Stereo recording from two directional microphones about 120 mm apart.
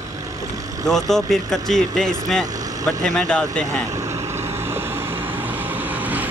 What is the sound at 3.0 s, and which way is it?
Speech, 5° left (ahead or behind).